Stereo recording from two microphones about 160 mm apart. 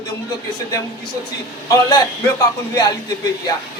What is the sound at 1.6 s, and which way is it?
A woman's voice, 20° left (ahead or behind).